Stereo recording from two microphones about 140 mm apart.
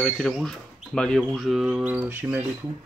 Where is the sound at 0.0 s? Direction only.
Centre (ahead or behind); by 2.4 s 15° right (ahead or behind).